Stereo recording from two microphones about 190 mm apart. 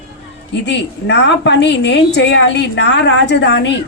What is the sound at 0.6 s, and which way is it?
A woman's voice, 70° left (ahead or behind).